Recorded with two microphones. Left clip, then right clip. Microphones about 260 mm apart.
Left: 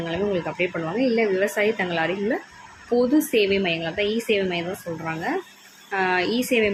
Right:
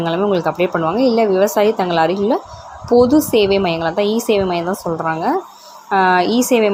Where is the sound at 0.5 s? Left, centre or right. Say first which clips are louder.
Right 9 dB; centre.